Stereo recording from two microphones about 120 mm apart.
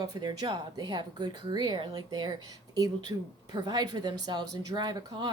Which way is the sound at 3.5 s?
35° right (ahead or behind).